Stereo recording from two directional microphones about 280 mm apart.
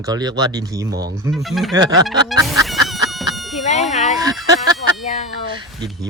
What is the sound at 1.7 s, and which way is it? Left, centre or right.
Speech, centre.